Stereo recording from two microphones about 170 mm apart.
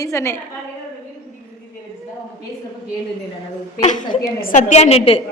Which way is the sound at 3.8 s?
50° left (ahead or behind).